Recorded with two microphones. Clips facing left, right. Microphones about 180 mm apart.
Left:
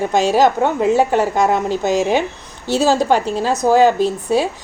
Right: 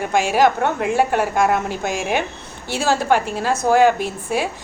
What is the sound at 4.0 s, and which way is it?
Speech, 10° right (ahead or behind).